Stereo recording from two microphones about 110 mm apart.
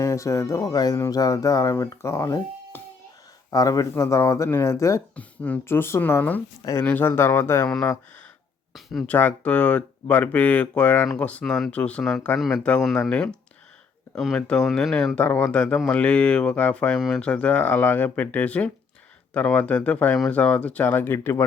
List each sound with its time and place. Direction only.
0.0 s speech: 25° left (ahead or behind)
5.1 s speech: 15° left (ahead or behind)
8.7 s a sound: centre (ahead or behind)
9.0 s speech: 15° left (ahead or behind)
15.2 s speech: 15° left (ahead or behind)